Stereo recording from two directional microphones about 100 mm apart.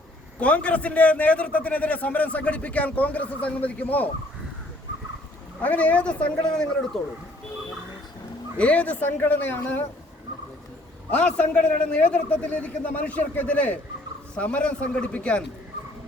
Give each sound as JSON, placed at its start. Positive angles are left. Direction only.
{"t": 0.3, "sound": "a man's voice", "side_deg": 15}
{"t": 5.6, "sound": "a man's voice", "side_deg": 15}
{"t": 8.5, "sound": "a man's voice", "side_deg": 15}
{"t": 11.1, "sound": "a man's voice", "side_deg": 15}